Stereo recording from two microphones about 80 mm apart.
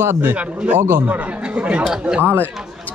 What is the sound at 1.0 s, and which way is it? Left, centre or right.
Speech, centre.